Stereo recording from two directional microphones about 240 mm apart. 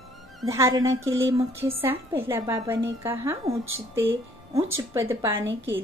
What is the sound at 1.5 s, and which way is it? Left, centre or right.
A woman's voice, centre.